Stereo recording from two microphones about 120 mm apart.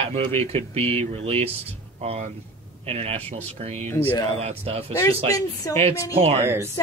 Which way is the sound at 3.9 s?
15° left (ahead or behind).